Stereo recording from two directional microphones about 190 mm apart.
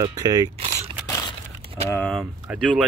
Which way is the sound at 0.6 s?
35° right (ahead or behind).